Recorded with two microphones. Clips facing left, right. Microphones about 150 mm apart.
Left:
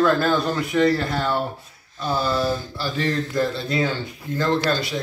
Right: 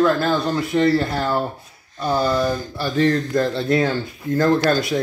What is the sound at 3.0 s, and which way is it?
Speech, 50° right (ahead or behind).